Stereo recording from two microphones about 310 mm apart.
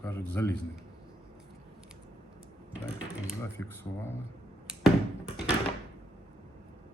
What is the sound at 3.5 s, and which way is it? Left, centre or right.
Speech, centre.